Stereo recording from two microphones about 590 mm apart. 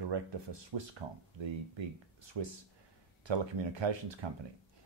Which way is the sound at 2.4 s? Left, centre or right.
Right.